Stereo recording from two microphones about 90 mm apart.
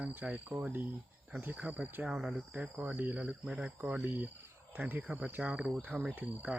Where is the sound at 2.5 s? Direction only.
15° right (ahead or behind).